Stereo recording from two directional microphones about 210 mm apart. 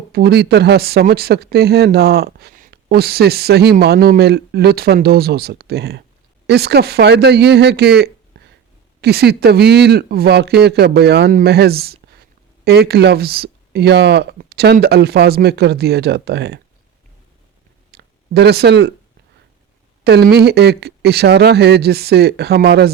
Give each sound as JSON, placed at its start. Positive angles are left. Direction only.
{"t": 0.1, "sound": "speech", "side_deg": -50}
{"t": 17.9, "sound": "a sound", "side_deg": -50}
{"t": 20.1, "sound": "speech", "side_deg": -50}